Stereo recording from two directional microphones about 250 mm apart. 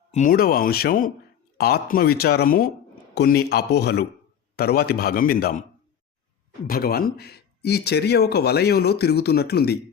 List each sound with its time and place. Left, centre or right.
0.1 s speech: left
6.7 s speech: left